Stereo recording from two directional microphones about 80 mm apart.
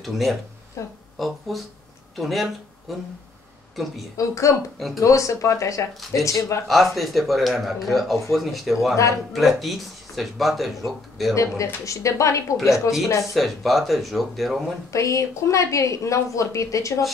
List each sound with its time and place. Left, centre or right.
0.0 s speech: centre
0.8 s a woman's voice: left
1.1 s speech: centre
4.2 s a woman's voice: left
4.7 s speech: centre
5.0 s a woman's voice: left
6.7 s speech: centre
11.3 s a woman's voice: left
13.3 s speech: centre
14.9 s a woman's voice: left